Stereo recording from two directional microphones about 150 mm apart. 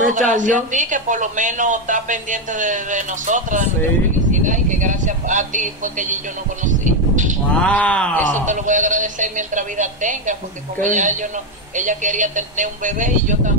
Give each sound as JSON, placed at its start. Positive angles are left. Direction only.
{"t": 0.1, "sound": "speech", "side_deg": -55}
{"t": 7.6, "sound": "speech", "side_deg": 5}
{"t": 8.5, "sound": "speech", "side_deg": -55}